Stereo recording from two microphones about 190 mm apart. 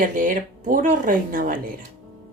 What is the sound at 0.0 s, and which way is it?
Speech, 45° right (ahead or behind).